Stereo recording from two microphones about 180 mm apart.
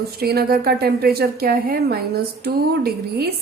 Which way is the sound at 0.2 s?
60° right (ahead or behind).